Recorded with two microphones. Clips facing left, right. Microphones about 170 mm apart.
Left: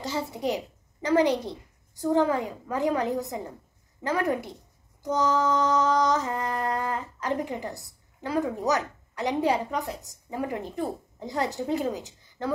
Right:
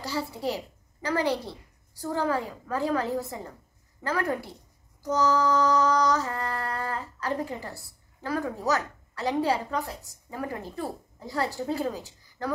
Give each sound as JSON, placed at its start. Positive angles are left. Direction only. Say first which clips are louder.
{"t": 0.0, "sound": "female singing", "louder": "left 1 dB", "side_deg": 20}